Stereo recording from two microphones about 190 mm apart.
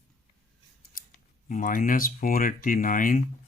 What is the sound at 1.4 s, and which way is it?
Speech, 45° left (ahead or behind).